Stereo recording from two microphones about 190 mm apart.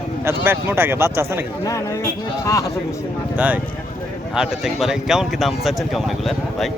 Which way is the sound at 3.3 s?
10° right (ahead or behind).